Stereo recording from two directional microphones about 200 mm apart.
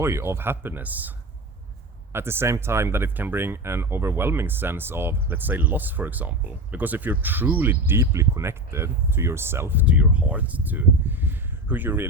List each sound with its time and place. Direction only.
0.0 s speech: 15° right (ahead or behind)
2.1 s speech: 10° right (ahead or behind)